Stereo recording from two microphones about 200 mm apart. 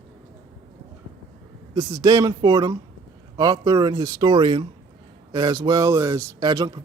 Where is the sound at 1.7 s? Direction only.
15° right (ahead or behind).